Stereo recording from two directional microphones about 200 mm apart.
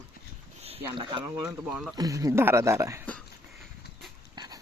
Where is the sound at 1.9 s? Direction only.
15° right (ahead or behind).